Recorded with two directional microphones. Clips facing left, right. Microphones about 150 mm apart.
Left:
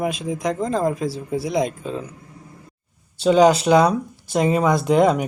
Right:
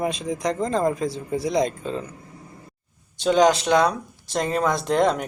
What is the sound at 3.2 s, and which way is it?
Speech, 5° left (ahead or behind).